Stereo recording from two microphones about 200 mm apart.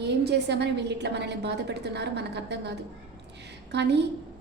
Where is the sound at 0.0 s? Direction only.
60° right (ahead or behind).